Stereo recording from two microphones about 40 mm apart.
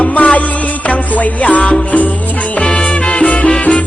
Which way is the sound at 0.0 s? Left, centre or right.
Left.